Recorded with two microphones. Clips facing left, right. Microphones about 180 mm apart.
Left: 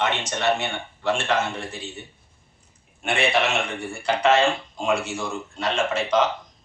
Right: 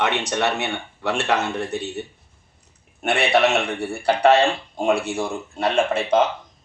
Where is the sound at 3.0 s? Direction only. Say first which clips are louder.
Right 3 dB; 65° right (ahead or behind).